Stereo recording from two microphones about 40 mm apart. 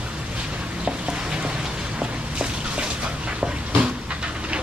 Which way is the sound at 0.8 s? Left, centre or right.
Right.